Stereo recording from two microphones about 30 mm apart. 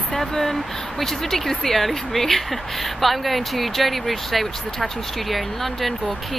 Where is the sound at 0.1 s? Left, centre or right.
Centre.